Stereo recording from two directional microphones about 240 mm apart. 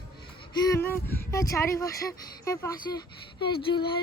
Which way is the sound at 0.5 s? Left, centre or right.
Centre.